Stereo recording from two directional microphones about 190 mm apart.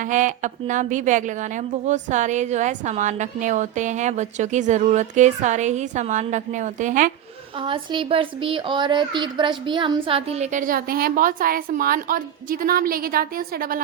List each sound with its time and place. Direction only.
0.0 s a woman's voice: 40° right (ahead or behind)
7.6 s speech: 25° right (ahead or behind); by 13.8 s 50° right (ahead or behind)